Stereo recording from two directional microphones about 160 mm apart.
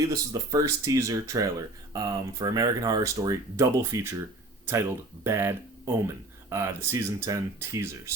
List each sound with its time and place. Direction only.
0.1 s speech: 20° right (ahead or behind)
5.2 s speech: 15° right (ahead or behind)